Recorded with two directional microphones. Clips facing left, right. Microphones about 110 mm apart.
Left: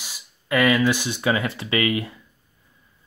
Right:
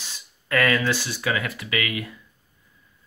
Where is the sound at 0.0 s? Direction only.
15° left (ahead or behind); by 2.1 s 30° left (ahead or behind).